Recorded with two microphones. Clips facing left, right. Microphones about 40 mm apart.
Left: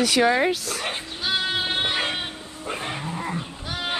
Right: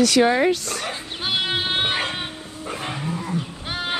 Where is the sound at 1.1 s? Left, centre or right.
Right.